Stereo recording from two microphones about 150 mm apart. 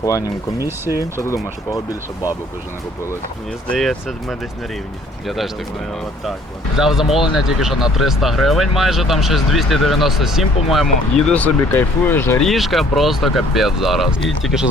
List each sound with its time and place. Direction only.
0.0 s speech: 20° left (ahead or behind)
0.6 s speech: 15° right (ahead or behind)
1.2 s speech: 20° left (ahead or behind)
3.8 s speech: centre (ahead or behind)
6.7 s speech: centre (ahead or behind); by 12.4 s 15° left (ahead or behind)
12.4 s speech: centre (ahead or behind)